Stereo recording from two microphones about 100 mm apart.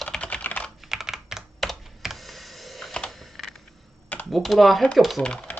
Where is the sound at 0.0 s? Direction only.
10° left (ahead or behind).